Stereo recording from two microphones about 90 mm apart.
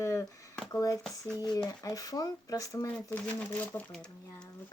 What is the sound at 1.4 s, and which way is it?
Speech, 45° left (ahead or behind).